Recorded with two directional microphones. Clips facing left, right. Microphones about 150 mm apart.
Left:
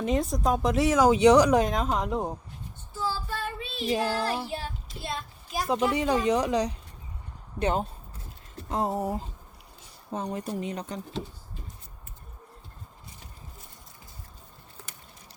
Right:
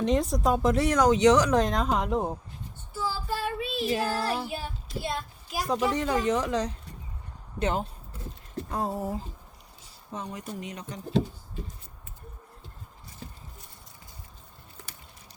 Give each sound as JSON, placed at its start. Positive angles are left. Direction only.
{"t": 0.0, "sound": "speech", "side_deg": 0}
{"t": 3.1, "sound": "child singing", "side_deg": -5}
{"t": 3.9, "sound": "speech", "side_deg": 15}
{"t": 4.4, "sound": "speech", "side_deg": -5}
{"t": 5.9, "sound": "speech", "side_deg": 10}
{"t": 7.6, "sound": "speech", "side_deg": 30}
{"t": 8.7, "sound": "speech", "side_deg": 20}
{"t": 10.1, "sound": "speech", "side_deg": 30}